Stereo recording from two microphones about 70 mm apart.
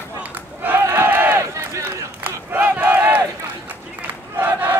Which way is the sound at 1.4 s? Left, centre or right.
Right.